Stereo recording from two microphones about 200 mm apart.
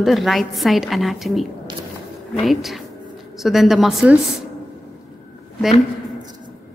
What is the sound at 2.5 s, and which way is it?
A woman's voice, centre (ahead or behind).